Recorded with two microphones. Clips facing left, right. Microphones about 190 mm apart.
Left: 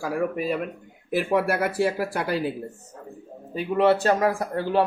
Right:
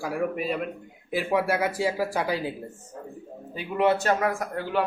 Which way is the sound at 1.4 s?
60° left (ahead or behind).